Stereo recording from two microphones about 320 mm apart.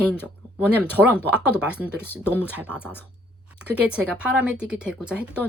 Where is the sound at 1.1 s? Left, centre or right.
Centre.